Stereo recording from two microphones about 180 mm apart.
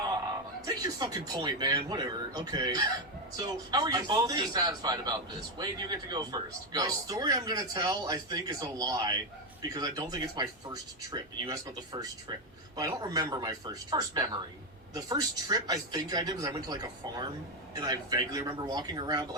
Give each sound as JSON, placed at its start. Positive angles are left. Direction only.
{"t": 0.6, "sound": "speech", "side_deg": -20}